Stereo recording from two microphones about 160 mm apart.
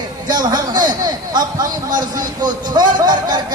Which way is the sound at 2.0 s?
25° right (ahead or behind).